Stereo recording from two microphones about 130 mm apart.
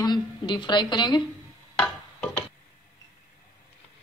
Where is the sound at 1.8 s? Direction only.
5° left (ahead or behind).